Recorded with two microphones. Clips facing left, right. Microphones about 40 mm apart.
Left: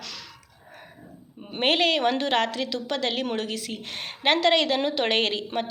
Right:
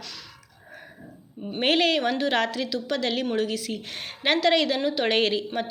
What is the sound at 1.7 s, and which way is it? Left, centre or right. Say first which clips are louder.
Speech: even; centre.